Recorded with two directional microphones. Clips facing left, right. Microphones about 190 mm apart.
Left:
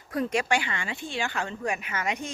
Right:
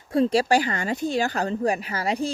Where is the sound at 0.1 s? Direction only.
30° right (ahead or behind).